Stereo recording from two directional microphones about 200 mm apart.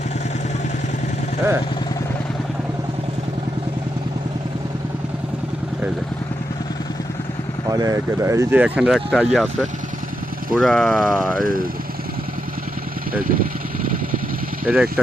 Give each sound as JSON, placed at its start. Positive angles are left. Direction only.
{"t": 7.7, "sound": "speech", "side_deg": -15}
{"t": 11.3, "sound": "speech", "side_deg": -45}
{"t": 13.2, "sound": "speech", "side_deg": -45}
{"t": 14.6, "sound": "speech", "side_deg": -10}